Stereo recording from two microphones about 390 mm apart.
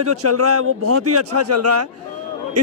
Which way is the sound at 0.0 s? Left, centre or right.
Right.